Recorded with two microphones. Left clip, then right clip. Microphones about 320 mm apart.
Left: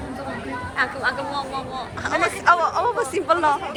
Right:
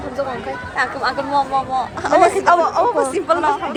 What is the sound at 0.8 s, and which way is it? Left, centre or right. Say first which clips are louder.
Speech: right 3 dB; centre.